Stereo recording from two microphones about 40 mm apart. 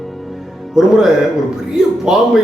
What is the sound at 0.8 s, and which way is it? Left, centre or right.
A man's voice, centre.